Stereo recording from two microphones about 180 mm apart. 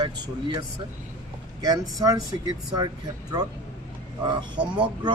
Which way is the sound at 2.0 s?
20° right (ahead or behind).